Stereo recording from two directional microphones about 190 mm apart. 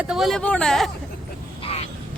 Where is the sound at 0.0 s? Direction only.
Centre (ahead or behind).